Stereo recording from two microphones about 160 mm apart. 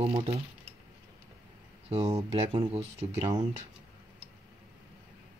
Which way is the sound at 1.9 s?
40° right (ahead or behind).